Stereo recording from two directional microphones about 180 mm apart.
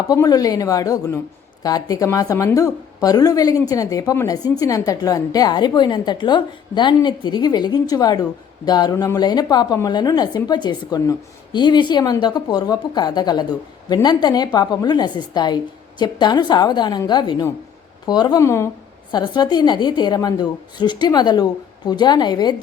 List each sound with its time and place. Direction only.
0.1 s a woman's voice: 20° left (ahead or behind)